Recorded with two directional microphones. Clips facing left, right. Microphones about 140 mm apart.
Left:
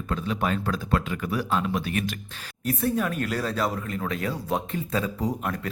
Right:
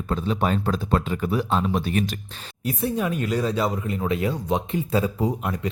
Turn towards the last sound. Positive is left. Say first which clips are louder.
# right 3 dB
turn(degrees=-5)  # may be behind; listen again after turning